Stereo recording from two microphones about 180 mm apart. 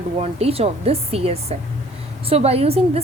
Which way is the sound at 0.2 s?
35° right (ahead or behind).